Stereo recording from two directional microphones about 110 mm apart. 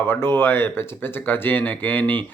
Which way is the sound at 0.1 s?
20° left (ahead or behind).